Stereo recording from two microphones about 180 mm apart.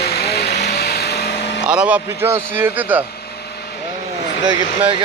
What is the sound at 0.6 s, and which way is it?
Vehicle, 65° left (ahead or behind).